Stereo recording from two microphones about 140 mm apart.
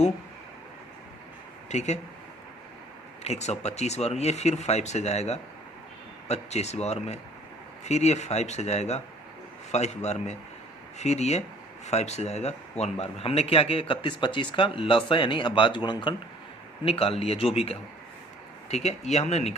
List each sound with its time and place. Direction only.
1.7 s speech: 55° left (ahead or behind)
3.2 s speech: 50° left (ahead or behind)